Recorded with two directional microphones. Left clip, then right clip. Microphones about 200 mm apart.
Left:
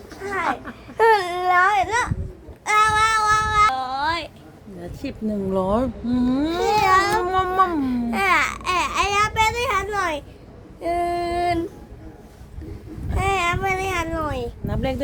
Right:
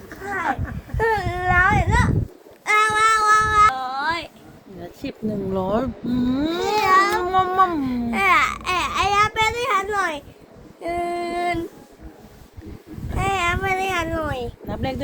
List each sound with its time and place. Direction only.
0.9 s baby cry: 25° left (ahead or behind)
2.6 s a sound: 10° left (ahead or behind)
5.5 s speech: 15° left (ahead or behind)
10.8 s female singing: 20° left (ahead or behind)
13.1 s speech: 10° left (ahead or behind)